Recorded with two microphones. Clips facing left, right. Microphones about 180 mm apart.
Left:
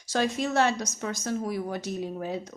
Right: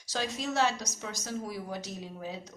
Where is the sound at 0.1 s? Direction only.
55° left (ahead or behind).